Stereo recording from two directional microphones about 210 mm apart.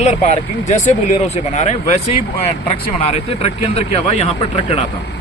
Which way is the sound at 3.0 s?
30° left (ahead or behind).